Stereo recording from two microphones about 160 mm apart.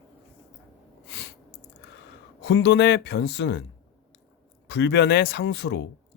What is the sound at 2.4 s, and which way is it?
Speech, 90° left.